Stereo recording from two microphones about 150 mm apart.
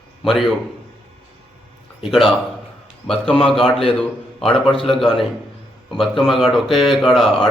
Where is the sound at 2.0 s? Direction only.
Centre (ahead or behind).